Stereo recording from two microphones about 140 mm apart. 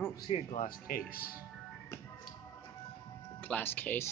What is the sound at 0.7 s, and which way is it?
Speech, 90° left.